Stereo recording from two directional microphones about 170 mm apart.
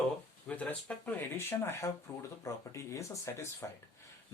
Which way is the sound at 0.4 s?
10° left (ahead or behind).